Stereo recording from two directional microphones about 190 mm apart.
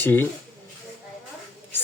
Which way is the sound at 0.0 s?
10° left (ahead or behind).